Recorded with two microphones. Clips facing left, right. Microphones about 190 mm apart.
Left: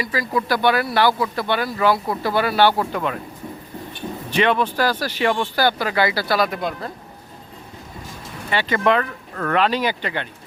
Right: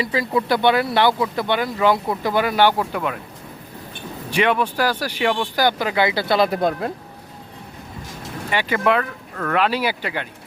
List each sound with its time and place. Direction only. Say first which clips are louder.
0.0 s speech: right 2 dB; 25° right (ahead or behind); by 3.2 s 10° right (ahead or behind)
4.3 s speech: even; 10° right (ahead or behind)
6.6 s speech: right 6 dB; 50° right (ahead or behind)
8.4 s speech: left 1 dB; 10° right (ahead or behind)